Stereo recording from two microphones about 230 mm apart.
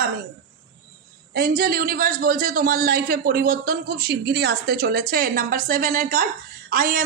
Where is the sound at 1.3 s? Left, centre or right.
Right.